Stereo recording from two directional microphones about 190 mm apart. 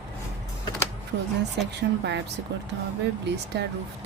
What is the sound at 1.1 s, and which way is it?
Speech, 65° right (ahead or behind).